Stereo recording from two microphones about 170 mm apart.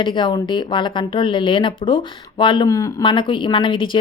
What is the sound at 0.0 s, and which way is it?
Speech, 30° left (ahead or behind).